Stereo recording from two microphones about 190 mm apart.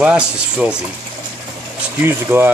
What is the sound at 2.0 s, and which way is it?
Speech, 10° right (ahead or behind).